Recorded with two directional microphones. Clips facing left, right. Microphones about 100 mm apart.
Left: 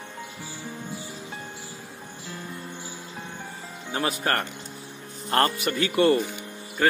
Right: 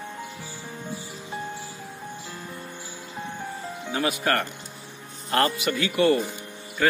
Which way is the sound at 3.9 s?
35° left (ahead or behind).